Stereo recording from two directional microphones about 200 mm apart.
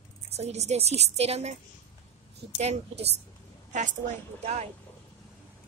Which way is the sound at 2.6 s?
30° right (ahead or behind).